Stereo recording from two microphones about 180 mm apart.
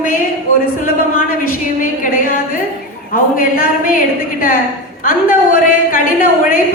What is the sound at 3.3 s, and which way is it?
Speech, 50° left (ahead or behind).